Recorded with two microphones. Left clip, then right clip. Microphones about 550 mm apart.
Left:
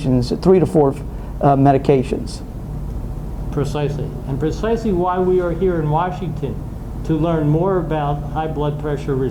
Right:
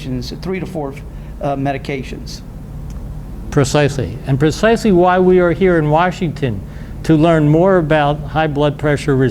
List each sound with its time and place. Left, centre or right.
0.0 s speech: left
3.5 s speech: right